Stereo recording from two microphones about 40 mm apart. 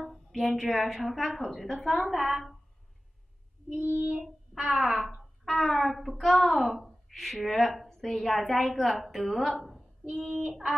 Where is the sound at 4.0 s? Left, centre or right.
Right.